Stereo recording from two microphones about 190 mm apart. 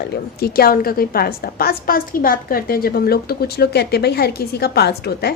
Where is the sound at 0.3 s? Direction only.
55° left (ahead or behind).